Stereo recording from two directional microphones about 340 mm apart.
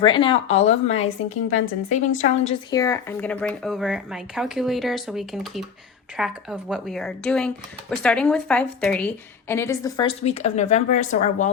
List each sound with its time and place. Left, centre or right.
0.0 s a woman's voice: centre